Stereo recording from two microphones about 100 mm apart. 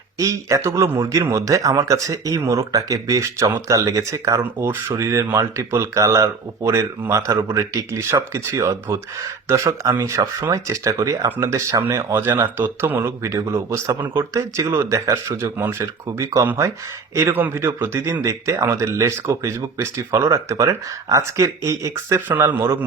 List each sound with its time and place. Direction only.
0.2 s speech: 30° right (ahead or behind)